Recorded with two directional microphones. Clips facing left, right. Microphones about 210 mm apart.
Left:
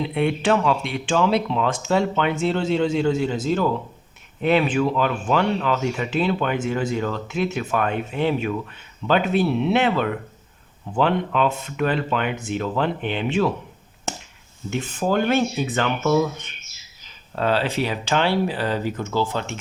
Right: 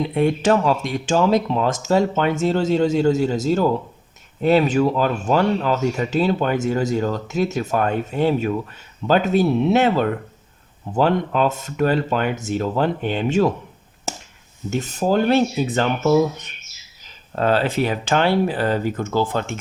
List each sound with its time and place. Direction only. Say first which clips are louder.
0.0 s speech: right 3 dB; 40° right (ahead or behind)
14.7 s speech: right 3 dB; 40° right (ahead or behind)
17.3 s speech: right 3 dB; 45° right (ahead or behind)